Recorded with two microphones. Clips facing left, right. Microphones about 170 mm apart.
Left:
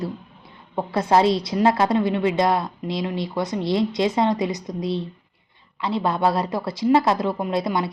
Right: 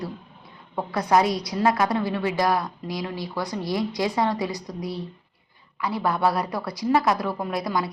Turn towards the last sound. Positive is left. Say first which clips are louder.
# left 3 dB
turn(degrees=25)  # may be behind; listen again after turning